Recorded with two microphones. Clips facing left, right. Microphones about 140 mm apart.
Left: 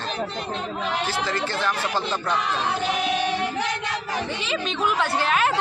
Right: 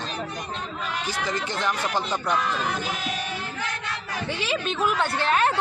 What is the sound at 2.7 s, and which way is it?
Music, 75° left (ahead or behind).